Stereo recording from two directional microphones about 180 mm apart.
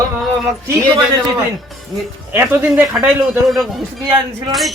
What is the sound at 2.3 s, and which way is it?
Speech, 10° right (ahead or behind).